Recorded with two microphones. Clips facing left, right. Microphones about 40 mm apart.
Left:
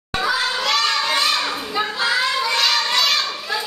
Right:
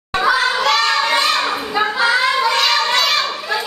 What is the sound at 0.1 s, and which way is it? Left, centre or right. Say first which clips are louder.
Children playing: right 5 dB; centre.